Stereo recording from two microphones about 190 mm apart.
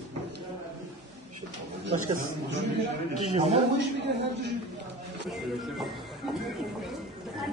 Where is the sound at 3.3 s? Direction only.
30° right (ahead or behind).